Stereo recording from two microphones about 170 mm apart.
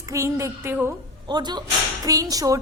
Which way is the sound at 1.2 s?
25° right (ahead or behind).